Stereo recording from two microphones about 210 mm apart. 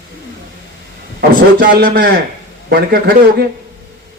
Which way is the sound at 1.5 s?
50° right (ahead or behind).